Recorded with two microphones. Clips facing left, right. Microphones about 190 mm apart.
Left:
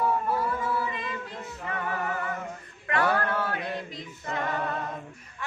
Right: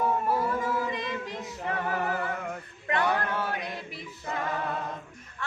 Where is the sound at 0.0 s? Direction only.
15° right (ahead or behind).